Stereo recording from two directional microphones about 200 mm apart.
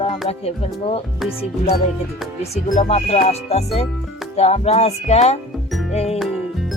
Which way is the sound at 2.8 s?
30° left (ahead or behind).